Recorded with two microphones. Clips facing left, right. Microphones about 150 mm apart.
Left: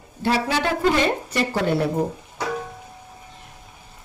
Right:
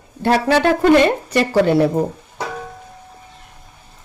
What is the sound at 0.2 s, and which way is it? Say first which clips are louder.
A woman's voice: right 7 dB; 55° right (ahead or behind).